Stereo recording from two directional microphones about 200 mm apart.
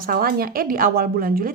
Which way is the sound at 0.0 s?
45° right (ahead or behind).